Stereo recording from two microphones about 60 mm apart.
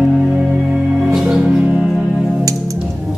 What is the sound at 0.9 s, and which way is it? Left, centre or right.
Music, centre.